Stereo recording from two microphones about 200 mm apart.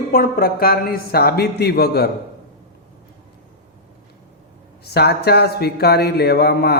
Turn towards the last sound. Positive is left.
turn(degrees=55)  # may be behind; listen again after turning